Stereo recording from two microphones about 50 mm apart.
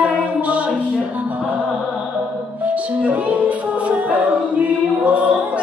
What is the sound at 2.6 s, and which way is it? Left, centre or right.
Music, right.